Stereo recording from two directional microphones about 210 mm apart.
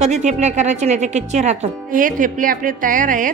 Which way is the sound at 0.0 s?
35° right (ahead or behind).